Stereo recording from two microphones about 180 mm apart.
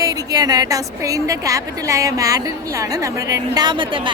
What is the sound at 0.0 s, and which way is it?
A woman's voice, 20° right (ahead or behind).